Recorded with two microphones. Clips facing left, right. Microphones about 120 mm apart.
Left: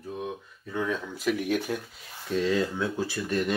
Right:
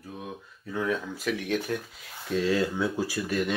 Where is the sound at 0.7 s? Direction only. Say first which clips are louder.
Right 1 dB; centre (ahead or behind).